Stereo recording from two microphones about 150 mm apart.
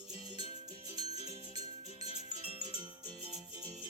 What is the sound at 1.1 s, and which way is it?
Music, 40° left (ahead or behind).